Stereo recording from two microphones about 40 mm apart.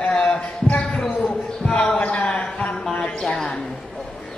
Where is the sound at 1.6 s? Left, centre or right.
Left.